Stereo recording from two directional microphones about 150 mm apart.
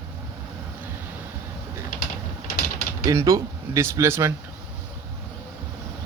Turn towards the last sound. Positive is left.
turn(degrees=-15)  # may be behind; listen again after turning